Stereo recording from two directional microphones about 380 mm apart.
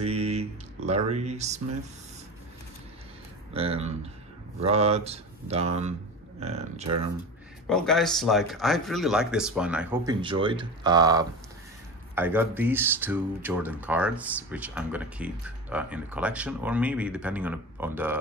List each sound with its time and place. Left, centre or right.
0.0 s music: centre
3.5 s speech: centre
7.6 s speech: centre